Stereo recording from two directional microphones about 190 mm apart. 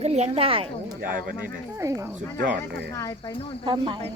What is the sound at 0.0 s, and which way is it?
Speech, 35° right (ahead or behind).